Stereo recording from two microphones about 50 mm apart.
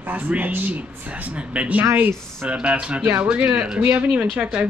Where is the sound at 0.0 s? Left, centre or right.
Right.